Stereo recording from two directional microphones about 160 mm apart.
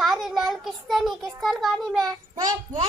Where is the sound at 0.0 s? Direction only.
Centre (ahead or behind).